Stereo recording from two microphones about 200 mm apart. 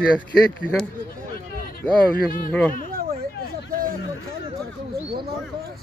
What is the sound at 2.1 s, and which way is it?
Speech, 45° left (ahead or behind).